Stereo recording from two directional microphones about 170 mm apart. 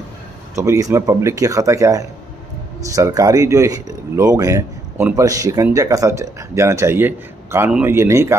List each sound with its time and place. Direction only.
0.6 s speech: 20° right (ahead or behind)